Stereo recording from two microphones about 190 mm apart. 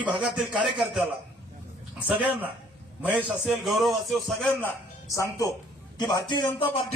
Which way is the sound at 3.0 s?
5° right (ahead or behind).